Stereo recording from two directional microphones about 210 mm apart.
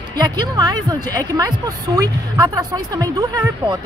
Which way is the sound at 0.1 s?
20° right (ahead or behind).